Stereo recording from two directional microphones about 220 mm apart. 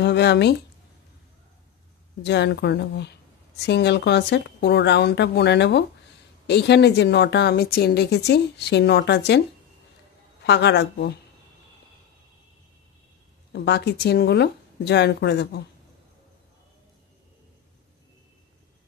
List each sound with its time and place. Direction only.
0.0 s speech: 50° left (ahead or behind)
2.2 s a woman's voice: 50° left (ahead or behind)
10.4 s a woman's voice: 50° left (ahead or behind)
13.5 s a woman's voice: 50° left (ahead or behind)